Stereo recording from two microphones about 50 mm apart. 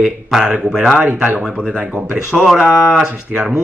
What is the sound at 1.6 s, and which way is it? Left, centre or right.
Speech, centre.